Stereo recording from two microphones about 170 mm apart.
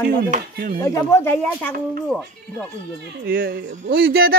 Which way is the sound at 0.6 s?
60° right (ahead or behind).